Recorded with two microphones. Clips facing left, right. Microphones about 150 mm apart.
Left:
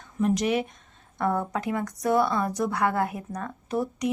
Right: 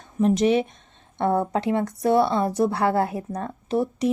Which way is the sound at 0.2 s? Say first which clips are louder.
Right 5 dB; 25° right (ahead or behind).